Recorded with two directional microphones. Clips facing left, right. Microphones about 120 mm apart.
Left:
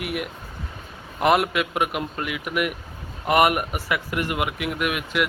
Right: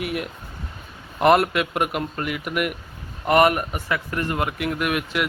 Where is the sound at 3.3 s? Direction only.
10° left (ahead or behind).